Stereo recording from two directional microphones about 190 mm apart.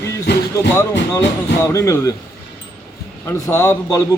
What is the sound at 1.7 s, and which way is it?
Speech, 15° left (ahead or behind).